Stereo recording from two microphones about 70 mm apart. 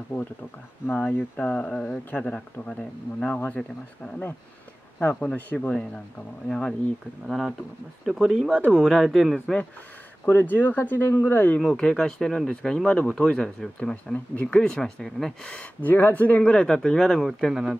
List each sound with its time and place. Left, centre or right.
0.8 s speech: left
2.2 s speech: centre
5.0 s speech: left
7.2 s speech: centre
8.7 s speech: centre
10.2 s speech: left
11.6 s speech: centre
15.8 s speech: left; by 17.7 s centre